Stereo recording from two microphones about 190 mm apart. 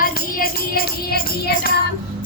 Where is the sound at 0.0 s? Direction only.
50° left (ahead or behind).